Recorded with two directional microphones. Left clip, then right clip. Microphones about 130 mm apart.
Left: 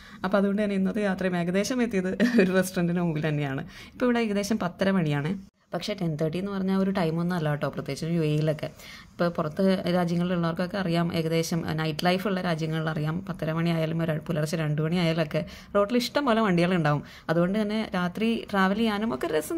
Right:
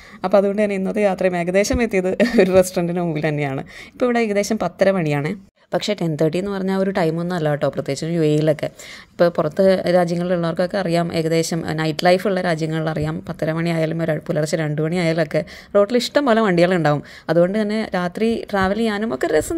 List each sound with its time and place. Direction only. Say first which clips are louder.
0.2 s a woman's voice: right 10 dB; 50° right (ahead or behind)